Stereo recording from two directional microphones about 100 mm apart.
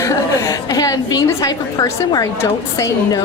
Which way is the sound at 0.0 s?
35° left (ahead or behind).